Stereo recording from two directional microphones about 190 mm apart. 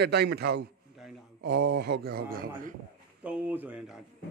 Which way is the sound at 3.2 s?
10° right (ahead or behind).